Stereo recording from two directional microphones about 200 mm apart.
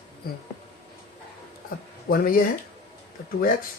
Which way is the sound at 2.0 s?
45° left (ahead or behind).